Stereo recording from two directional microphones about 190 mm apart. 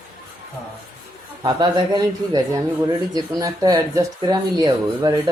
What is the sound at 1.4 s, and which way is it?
Speech, 25° right (ahead or behind).